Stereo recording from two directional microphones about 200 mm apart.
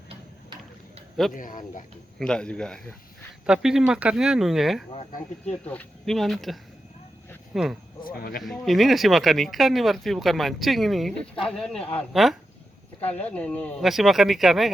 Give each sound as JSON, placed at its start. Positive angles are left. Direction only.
{"t": 1.3, "sound": "speech", "side_deg": 40}
{"t": 2.1, "sound": "speech", "side_deg": 5}
{"t": 4.9, "sound": "speech", "side_deg": 35}
{"t": 5.6, "sound": "speech", "side_deg": 5}
{"t": 8.0, "sound": "speech", "side_deg": 50}
{"t": 8.4, "sound": "speech", "side_deg": 0}